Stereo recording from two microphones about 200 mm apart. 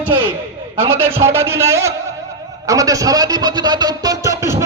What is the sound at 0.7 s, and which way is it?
A man's voice, 10° right (ahead or behind).